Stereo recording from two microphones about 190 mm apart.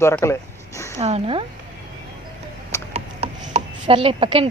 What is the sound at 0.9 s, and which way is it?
Speech, 35° right (ahead or behind).